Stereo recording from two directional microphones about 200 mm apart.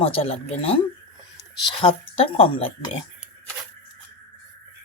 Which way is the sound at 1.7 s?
25° left (ahead or behind).